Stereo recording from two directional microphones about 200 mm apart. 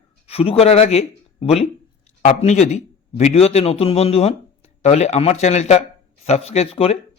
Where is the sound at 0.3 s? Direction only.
30° left (ahead or behind).